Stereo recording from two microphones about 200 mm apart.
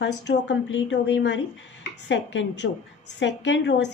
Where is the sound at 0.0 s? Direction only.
70° left (ahead or behind).